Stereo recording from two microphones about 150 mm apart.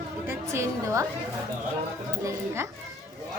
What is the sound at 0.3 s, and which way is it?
Speech, 20° right (ahead or behind).